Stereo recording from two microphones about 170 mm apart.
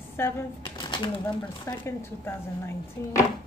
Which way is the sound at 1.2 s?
15° left (ahead or behind).